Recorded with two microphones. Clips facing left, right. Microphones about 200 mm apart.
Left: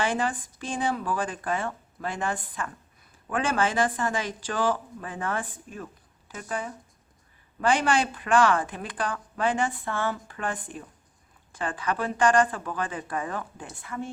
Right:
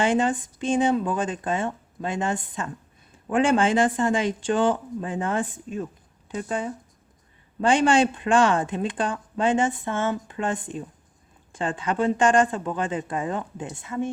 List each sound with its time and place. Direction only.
0.0 s speech: 25° right (ahead or behind)